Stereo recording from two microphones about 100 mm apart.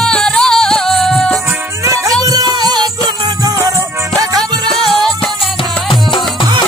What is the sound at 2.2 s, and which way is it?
Music, 40° right (ahead or behind).